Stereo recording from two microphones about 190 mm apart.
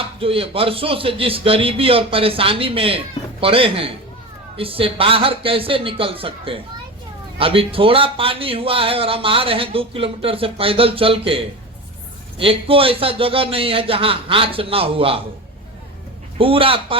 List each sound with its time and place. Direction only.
0.0 s speech: 30° right (ahead or behind)
16.4 s speech: 30° right (ahead or behind)